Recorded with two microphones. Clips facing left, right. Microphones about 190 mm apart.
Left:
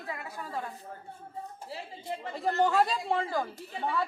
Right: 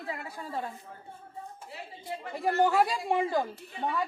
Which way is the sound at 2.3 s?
10° right (ahead or behind).